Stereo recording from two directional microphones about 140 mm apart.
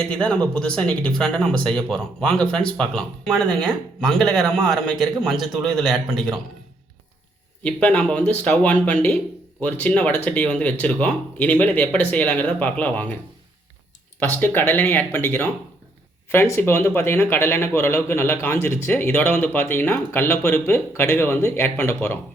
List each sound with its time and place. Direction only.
0.1 s speech: 10° left (ahead or behind)
7.6 s a man's voice: 10° left (ahead or behind)
14.2 s a man's voice: 15° left (ahead or behind)